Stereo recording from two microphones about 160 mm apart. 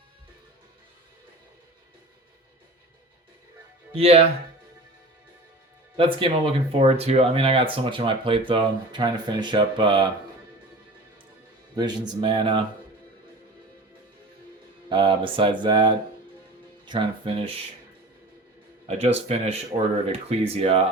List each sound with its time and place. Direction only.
3.9 s speech: 40° right (ahead or behind)
6.0 s speech: 30° right (ahead or behind)
11.8 s speech: 25° right (ahead or behind)
14.8 s speech: 30° right (ahead or behind)
18.9 s speech: 40° right (ahead or behind)